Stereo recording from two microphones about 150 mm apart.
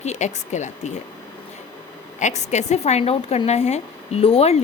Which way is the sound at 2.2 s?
50° left (ahead or behind).